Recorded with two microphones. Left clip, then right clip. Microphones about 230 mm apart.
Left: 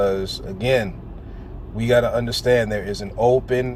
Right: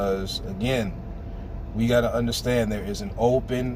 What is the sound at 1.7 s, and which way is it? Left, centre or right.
Speech, left.